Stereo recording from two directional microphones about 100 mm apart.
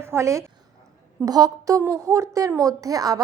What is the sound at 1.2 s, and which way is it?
Speech, 40° right (ahead or behind).